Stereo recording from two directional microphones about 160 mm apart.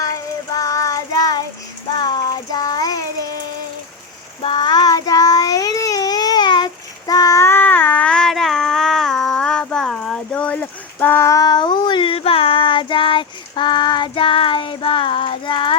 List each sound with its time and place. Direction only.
0.0 s child singing: 20° left (ahead or behind)
4.4 s child singing: 30° left (ahead or behind)